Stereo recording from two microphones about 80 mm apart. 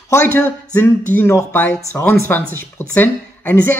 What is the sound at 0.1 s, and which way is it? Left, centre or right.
Speech, left.